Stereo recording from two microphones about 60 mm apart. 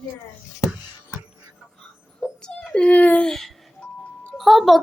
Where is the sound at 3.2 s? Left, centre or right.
Centre.